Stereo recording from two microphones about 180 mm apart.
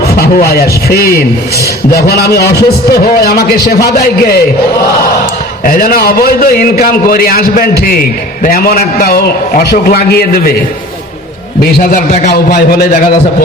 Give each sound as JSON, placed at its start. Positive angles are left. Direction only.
{"t": 0.1, "sound": "a man's voice", "side_deg": 60}
{"t": 5.6, "sound": "a man's voice", "side_deg": 55}
{"t": 11.6, "sound": "a man's voice", "side_deg": 55}